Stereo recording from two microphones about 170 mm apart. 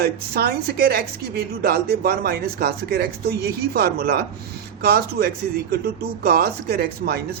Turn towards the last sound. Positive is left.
turn(degrees=-70)  # may be behind; listen again after turning